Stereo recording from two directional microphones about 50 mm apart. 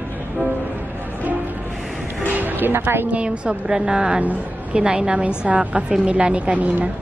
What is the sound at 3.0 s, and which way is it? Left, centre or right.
A woman's voice, right.